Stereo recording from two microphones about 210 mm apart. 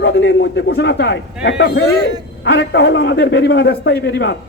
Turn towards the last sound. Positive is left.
turn(degrees=55)  # may be behind; listen again after turning